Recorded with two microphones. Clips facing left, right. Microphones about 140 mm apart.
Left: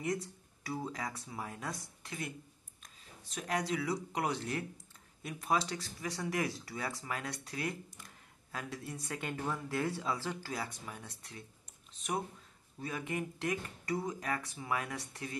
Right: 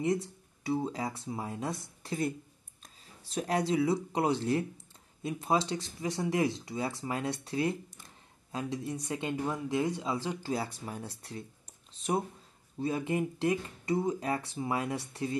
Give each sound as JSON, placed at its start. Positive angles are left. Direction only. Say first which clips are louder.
{"t": 0.0, "sound": "speech", "louder": "right 6 dB", "side_deg": -25}
{"t": 12.7, "sound": "speech", "louder": "right 7 dB", "side_deg": -30}